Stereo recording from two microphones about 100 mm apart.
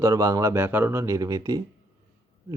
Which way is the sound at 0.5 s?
20° right (ahead or behind).